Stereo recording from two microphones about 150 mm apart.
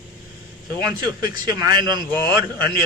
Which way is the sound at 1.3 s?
25° right (ahead or behind).